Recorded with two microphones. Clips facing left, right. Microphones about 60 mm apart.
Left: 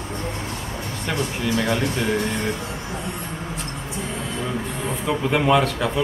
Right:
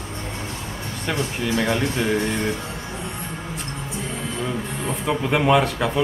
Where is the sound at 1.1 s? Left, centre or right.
Centre.